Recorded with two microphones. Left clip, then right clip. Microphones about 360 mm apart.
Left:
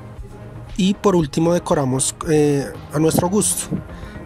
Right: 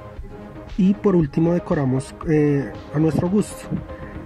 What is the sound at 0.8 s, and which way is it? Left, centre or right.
Speech, left.